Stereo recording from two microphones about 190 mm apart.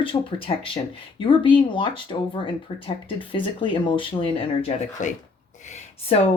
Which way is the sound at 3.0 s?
25° left (ahead or behind).